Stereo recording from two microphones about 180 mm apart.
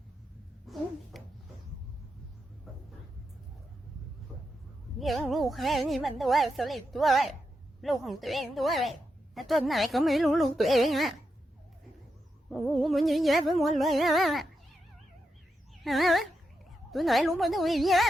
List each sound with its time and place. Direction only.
0.7 s a sound: centre (ahead or behind)
4.9 s speech: centre (ahead or behind)
12.5 s speech: centre (ahead or behind)
15.8 s speech: centre (ahead or behind)